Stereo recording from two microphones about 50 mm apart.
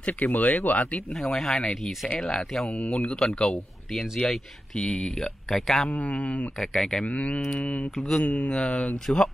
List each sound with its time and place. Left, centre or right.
0.0 s speech: left
1.1 s speech: centre
2.7 s speech: left; by 5.9 s centre
5.9 s speech: left
6.6 s speech: centre
7.1 s speech: left
8.5 s speech: centre
9.0 s speech: centre